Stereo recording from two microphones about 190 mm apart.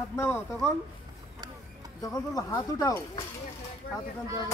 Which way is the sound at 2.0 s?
20° left (ahead or behind).